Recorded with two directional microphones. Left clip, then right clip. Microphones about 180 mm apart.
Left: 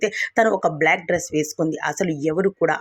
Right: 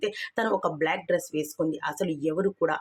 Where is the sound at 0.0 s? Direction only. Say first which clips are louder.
Left 10 dB; 25° left (ahead or behind).